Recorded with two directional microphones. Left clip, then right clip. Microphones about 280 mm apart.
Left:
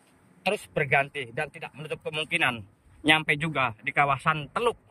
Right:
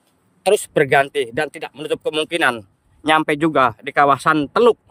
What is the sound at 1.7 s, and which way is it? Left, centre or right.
A man's voice, right.